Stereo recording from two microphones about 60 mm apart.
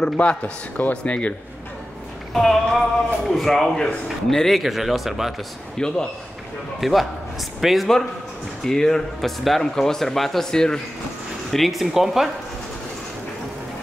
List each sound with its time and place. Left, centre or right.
0.0 s speech: centre
2.3 s a man's voice: centre
5.8 s speech: centre
6.8 s a man's voice: centre
11.5 s a man's voice: centre